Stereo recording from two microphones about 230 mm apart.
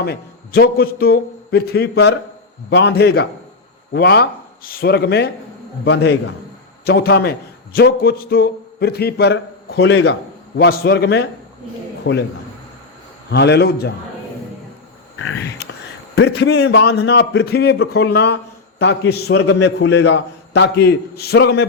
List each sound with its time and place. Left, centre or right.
0.0 s speech: left
13.3 s speech: left
15.6 s a sound: left
16.1 s speech: left